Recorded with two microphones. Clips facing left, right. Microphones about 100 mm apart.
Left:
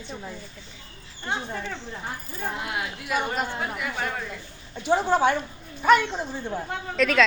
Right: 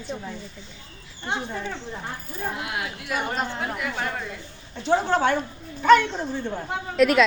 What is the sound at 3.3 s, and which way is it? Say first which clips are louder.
Speech: right 1 dB; 5° left (ahead or behind).